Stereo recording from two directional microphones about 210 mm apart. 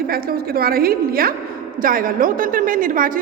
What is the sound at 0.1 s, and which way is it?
A woman's voice, 45° right (ahead or behind).